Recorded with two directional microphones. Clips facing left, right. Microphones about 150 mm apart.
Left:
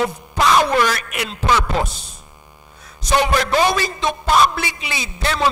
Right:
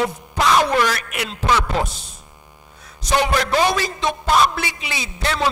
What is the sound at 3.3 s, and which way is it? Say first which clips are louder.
A man's voice: left 1 dB; 15° left (ahead or behind).